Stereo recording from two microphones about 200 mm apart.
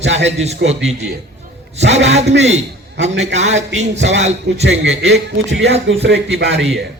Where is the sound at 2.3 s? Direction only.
35° right (ahead or behind).